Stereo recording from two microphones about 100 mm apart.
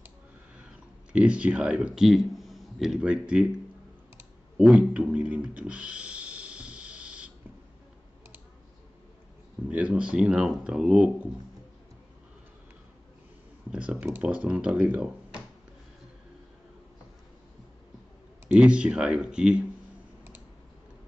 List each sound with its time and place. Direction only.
1.1 s speech: 10° right (ahead or behind)
4.6 s a sound: 10° right (ahead or behind)
9.7 s speech: 10° right (ahead or behind)
13.7 s speech: 10° right (ahead or behind)
18.5 s speech: 10° right (ahead or behind)